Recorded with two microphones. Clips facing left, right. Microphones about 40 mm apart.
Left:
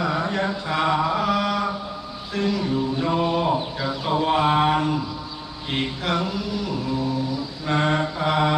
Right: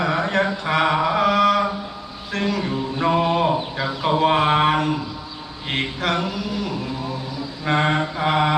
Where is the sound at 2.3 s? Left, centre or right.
Right.